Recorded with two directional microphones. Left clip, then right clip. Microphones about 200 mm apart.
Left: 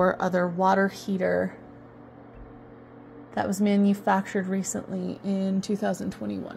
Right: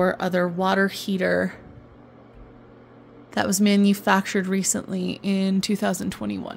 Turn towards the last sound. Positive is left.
turn(degrees=-35)  # may be behind; listen again after turning